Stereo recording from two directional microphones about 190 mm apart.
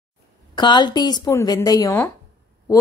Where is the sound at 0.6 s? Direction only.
25° left (ahead or behind).